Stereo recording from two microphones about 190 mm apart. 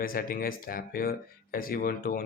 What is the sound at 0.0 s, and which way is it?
Speech, 50° left (ahead or behind).